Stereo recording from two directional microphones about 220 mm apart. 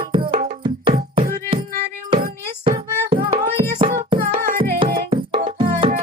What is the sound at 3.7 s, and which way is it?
Music, 35° right (ahead or behind).